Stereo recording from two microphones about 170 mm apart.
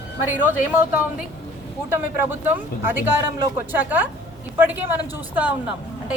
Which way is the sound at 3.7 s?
10° right (ahead or behind).